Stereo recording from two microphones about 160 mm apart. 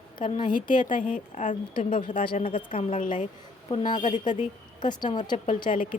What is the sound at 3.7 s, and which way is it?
Speech, 30° left (ahead or behind).